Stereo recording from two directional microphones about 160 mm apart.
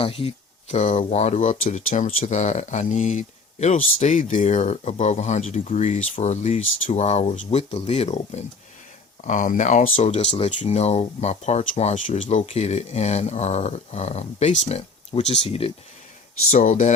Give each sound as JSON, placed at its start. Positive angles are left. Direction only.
{"t": 0.0, "sound": "speech", "side_deg": 35}
{"t": 16.5, "sound": "speech", "side_deg": 55}